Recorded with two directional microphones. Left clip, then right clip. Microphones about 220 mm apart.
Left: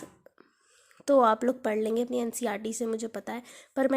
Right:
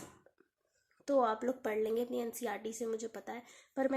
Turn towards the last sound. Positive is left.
turn(degrees=45)  # may be behind; listen again after turning